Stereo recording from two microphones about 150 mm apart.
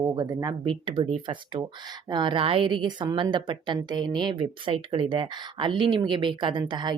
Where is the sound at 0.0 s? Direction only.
30° right (ahead or behind).